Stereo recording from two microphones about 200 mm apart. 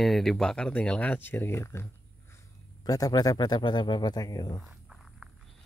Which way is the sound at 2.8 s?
20° left (ahead or behind).